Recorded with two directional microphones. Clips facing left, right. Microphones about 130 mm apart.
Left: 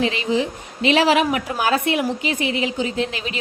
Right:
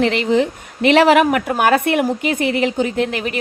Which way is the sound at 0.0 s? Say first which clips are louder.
Right 5 dB; 60° right (ahead or behind).